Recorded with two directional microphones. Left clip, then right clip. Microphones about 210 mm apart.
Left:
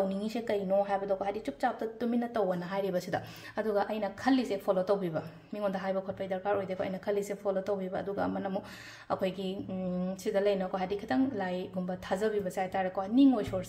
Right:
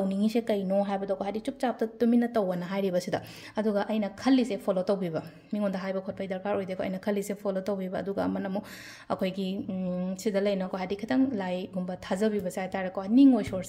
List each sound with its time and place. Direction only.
0.1 s a woman's voice: 40° right (ahead or behind)